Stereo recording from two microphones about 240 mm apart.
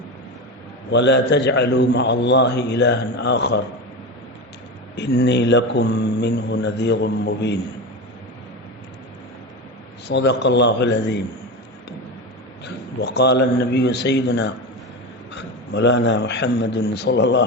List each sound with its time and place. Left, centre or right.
0.9 s a man's voice: left
4.9 s a man's voice: left
10.1 s a man's voice: left
12.6 s a man's voice: left